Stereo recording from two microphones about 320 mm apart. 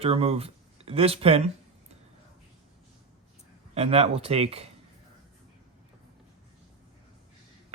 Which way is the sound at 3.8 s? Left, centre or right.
Centre.